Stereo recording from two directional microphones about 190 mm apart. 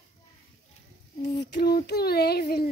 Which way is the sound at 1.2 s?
65° left (ahead or behind).